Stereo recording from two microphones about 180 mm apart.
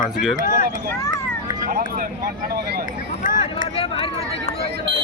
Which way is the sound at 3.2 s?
50° left (ahead or behind).